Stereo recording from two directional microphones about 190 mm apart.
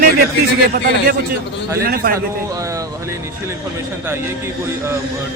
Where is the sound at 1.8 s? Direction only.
50° right (ahead or behind).